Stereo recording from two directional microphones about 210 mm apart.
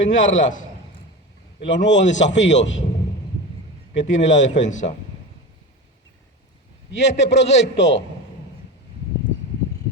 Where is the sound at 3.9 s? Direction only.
60° left (ahead or behind).